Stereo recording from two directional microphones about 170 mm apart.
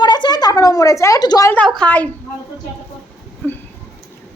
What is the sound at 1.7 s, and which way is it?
Speech, 5° left (ahead or behind).